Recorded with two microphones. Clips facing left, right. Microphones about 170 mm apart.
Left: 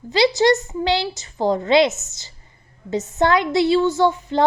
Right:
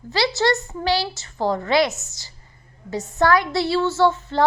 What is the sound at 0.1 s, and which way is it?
A woman's voice, 20° left (ahead or behind).